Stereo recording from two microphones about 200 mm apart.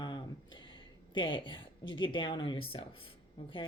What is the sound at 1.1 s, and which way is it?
Speech, 25° left (ahead or behind).